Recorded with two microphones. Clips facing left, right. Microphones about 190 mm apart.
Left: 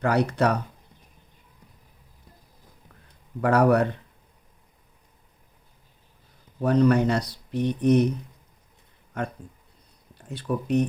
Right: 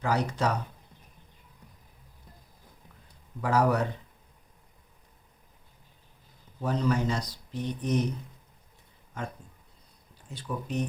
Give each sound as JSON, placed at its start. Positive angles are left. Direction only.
{"t": 0.0, "sound": "speech", "side_deg": 65}
{"t": 3.4, "sound": "speech", "side_deg": 60}
{"t": 6.6, "sound": "speech", "side_deg": 65}
{"t": 9.2, "sound": "speech", "side_deg": 65}